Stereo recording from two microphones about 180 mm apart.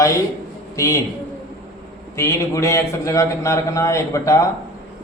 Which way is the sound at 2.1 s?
15° left (ahead or behind).